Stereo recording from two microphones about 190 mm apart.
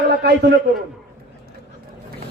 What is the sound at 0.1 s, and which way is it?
Speech, 60° right (ahead or behind).